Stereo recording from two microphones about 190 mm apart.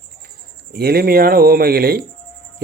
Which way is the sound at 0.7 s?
55° right (ahead or behind).